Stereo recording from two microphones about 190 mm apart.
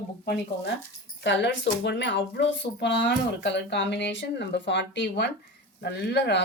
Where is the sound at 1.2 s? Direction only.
70° left (ahead or behind).